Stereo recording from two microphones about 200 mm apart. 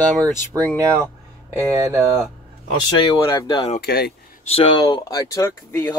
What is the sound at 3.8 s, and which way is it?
Speech, 50° left (ahead or behind).